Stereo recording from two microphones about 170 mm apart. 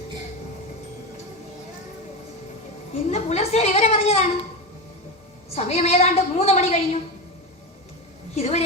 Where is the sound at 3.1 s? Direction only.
40° left (ahead or behind).